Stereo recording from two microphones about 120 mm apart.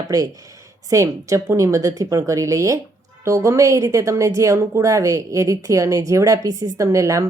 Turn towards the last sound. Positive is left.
turn(degrees=-25)  # may be behind; listen again after turning